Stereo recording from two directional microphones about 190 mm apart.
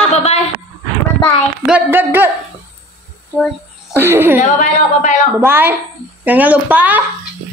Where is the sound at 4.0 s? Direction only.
10° right (ahead or behind).